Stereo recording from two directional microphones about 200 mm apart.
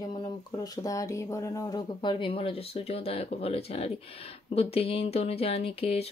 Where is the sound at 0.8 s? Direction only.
15° left (ahead or behind).